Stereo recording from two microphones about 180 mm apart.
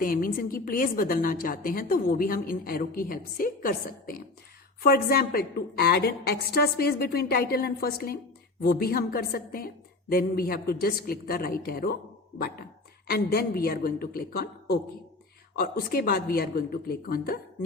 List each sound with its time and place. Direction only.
0.0 s a woman's voice: 50° left (ahead or behind)